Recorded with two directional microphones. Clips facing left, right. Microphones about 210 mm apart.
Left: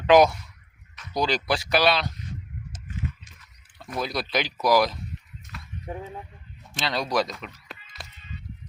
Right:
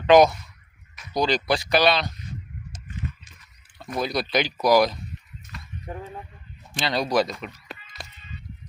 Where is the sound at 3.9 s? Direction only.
Centre (ahead or behind).